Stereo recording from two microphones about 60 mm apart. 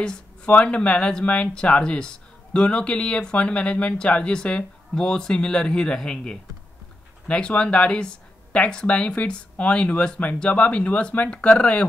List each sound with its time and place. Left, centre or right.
0.5 s speech: left